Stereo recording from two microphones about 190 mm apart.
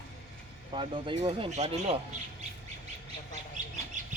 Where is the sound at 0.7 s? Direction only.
25° right (ahead or behind).